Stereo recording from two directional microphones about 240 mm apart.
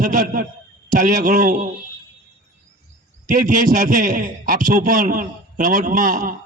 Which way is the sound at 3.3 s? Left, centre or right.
Right.